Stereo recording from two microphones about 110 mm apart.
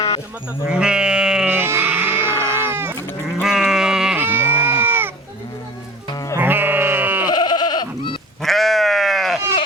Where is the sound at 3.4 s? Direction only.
5° right (ahead or behind).